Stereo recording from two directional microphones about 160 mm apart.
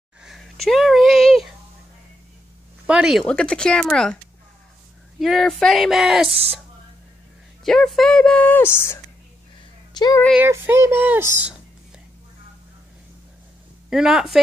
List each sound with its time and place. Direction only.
0.2 s a sound: centre (ahead or behind)
2.9 s speech: 5° right (ahead or behind)
5.2 s speech: centre (ahead or behind)
7.6 s speech: 5° left (ahead or behind); by 10.2 s 25° left (ahead or behind)
10.3 s speech: 15° right (ahead or behind)
13.8 s speech: 5° right (ahead or behind)